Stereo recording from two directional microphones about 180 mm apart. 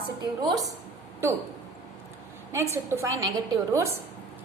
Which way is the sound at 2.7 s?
15° right (ahead or behind).